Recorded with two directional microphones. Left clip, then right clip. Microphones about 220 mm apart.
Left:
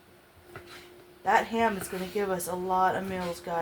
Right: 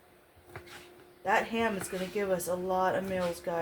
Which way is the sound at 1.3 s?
20° left (ahead or behind).